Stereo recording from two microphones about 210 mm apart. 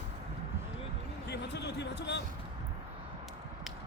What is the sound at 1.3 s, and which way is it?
Speech, 55° left (ahead or behind).